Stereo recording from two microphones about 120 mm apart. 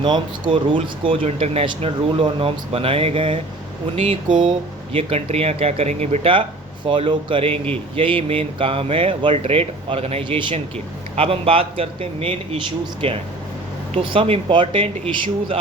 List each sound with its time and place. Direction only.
0.0 s speech: 40° right (ahead or behind)
1.4 s speech: 55° right (ahead or behind)
4.3 s speech: 40° right (ahead or behind)
4.9 s speech: 55° right (ahead or behind)
6.8 s speech: 45° right (ahead or behind)